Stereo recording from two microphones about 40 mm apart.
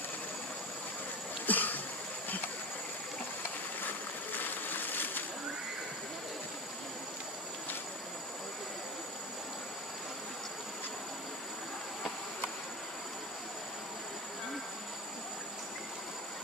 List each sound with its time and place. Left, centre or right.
1.4 s cough: left
3.8 s boat: left